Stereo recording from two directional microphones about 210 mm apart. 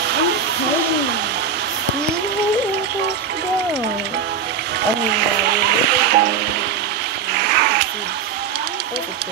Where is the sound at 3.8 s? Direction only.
55° right (ahead or behind).